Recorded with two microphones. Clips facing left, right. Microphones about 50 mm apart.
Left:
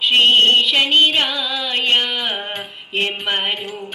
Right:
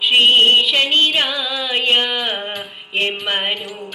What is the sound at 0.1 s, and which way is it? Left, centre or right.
Music, centre.